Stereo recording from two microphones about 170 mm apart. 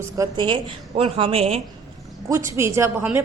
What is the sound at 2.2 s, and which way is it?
Speech, 20° right (ahead or behind).